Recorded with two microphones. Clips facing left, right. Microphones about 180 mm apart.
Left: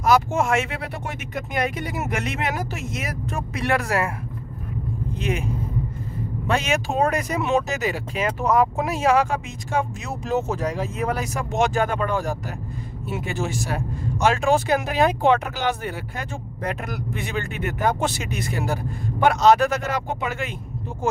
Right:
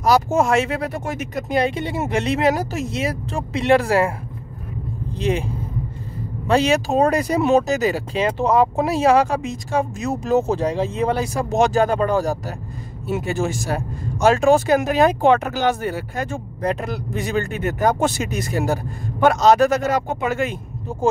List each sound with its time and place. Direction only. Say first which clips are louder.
0.0 s speech: right 3 dB; 35° right (ahead or behind)
5.2 s speech: right 5 dB; 30° right (ahead or behind)
6.5 s speech: right 6 dB; 35° right (ahead or behind)